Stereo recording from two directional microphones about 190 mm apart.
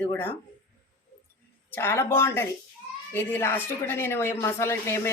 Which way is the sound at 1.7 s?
15° left (ahead or behind).